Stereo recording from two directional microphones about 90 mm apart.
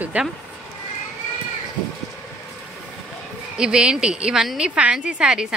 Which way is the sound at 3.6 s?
10° right (ahead or behind).